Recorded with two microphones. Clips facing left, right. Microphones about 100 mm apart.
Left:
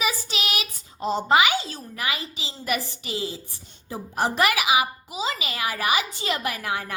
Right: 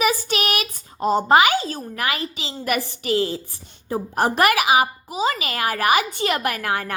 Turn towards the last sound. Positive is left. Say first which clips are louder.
# right 4 dB
turn(degrees=-55)  # may be behind; listen again after turning